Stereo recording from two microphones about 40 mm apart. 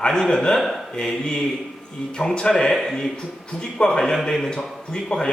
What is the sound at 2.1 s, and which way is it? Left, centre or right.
Speech, centre.